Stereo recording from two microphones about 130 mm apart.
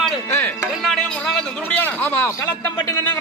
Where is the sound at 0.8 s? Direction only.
Centre (ahead or behind).